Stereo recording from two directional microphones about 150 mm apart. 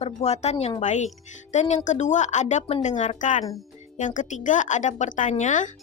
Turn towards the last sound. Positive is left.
turn(degrees=55)  # may be behind; listen again after turning